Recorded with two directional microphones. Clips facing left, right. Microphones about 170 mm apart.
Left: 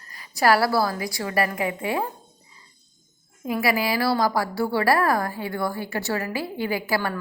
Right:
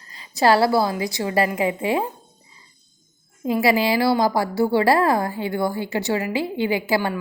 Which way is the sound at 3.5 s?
25° right (ahead or behind).